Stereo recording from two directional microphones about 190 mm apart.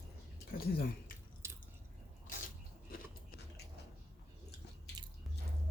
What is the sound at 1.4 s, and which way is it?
Drip, 15° right (ahead or behind).